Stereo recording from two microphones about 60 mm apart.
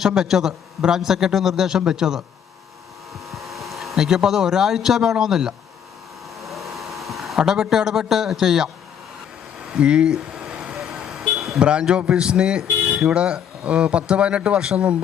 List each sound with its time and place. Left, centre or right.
0.0 s a man's voice: centre
3.2 s speech: centre
6.4 s a sound: centre
9.7 s a man's voice: centre
10.2 s a sound: centre
10.8 s vehicle: centre
11.6 s a man's voice: centre